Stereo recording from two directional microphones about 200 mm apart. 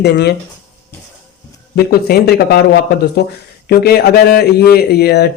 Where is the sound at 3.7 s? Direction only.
50° left (ahead or behind).